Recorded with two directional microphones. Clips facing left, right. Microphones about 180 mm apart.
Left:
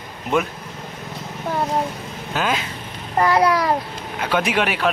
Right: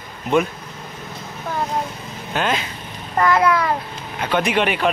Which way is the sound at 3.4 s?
35° left (ahead or behind).